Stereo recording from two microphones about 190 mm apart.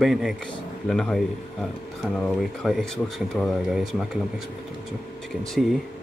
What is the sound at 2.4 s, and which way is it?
Speech, centre (ahead or behind).